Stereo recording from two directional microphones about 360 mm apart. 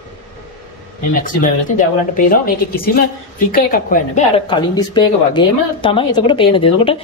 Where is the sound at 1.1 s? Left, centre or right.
Left.